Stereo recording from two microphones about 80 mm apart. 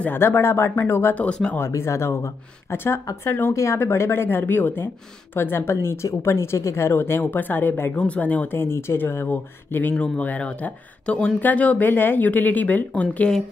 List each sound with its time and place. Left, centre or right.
0.0 s speech: left
1.1 s speech: centre
1.6 s speech: left; by 13.3 s centre